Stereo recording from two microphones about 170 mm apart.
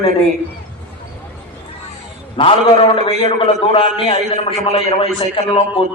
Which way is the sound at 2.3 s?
35° left (ahead or behind).